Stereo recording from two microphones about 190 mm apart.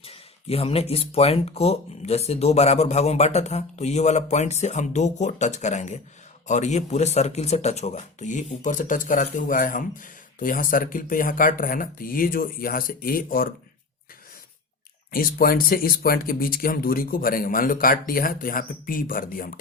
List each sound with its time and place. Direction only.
0.0 s speech: 30° left (ahead or behind); by 13.5 s 50° left (ahead or behind)
15.1 s speech: 50° left (ahead or behind)